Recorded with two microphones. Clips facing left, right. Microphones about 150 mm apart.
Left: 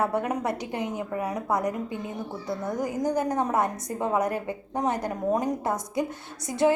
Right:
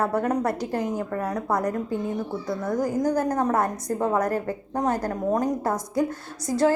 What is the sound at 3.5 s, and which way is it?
A woman's voice, centre (ahead or behind).